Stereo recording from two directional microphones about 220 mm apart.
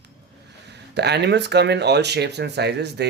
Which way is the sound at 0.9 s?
50° right (ahead or behind).